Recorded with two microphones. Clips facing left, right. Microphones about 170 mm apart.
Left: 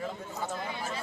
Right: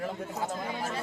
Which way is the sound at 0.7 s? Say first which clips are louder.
Right 3 dB; 45° right (ahead or behind).